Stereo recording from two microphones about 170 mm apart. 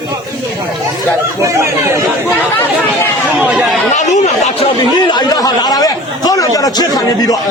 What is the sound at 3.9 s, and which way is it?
Speech, 45° left (ahead or behind).